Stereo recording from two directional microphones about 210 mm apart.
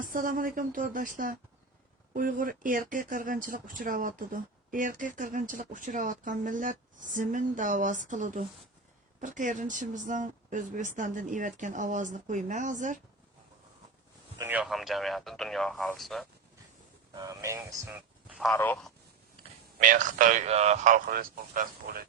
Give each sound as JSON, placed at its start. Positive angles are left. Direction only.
{"t": 0.0, "sound": "speech", "side_deg": -40}
{"t": 14.3, "sound": "speech", "side_deg": -10}
{"t": 17.2, "sound": "speech", "side_deg": -15}
{"t": 18.5, "sound": "speech", "side_deg": 10}
{"t": 19.8, "sound": "speech", "side_deg": -40}